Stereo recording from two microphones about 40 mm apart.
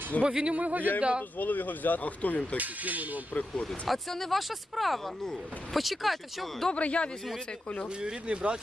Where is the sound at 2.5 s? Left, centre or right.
Right.